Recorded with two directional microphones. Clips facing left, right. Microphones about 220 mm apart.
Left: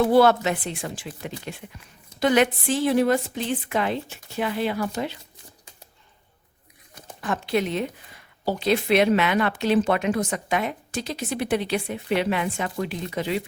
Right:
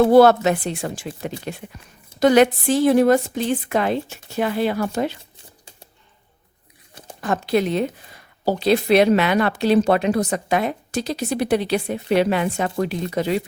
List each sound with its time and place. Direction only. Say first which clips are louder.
0.0 s a woman's voice: right 5 dB; 45° right (ahead or behind)
7.2 s speech: right 4 dB; 40° right (ahead or behind)